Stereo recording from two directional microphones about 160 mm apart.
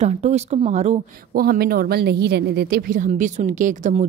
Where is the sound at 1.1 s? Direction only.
65° right (ahead or behind).